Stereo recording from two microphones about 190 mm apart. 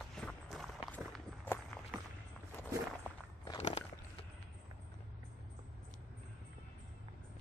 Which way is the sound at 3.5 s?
35° left (ahead or behind).